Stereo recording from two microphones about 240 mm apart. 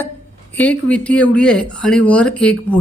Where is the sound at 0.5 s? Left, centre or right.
Centre.